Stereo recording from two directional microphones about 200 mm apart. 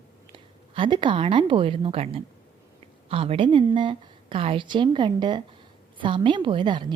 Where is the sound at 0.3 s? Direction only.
25° right (ahead or behind).